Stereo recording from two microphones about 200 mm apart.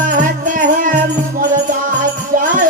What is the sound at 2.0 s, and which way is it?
Music, 40° right (ahead or behind).